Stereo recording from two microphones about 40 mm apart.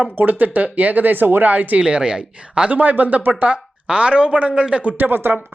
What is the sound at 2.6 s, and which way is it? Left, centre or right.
Speech, right.